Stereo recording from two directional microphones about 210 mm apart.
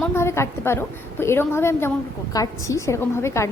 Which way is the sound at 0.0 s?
10° left (ahead or behind).